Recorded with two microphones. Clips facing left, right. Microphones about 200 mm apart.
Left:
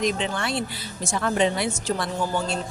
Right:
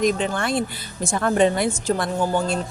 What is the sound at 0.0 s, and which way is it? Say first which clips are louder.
A woman's voice: right 4 dB; 50° right (ahead or behind).